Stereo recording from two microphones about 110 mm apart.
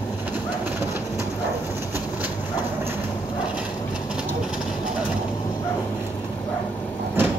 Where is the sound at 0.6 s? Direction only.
20° right (ahead or behind).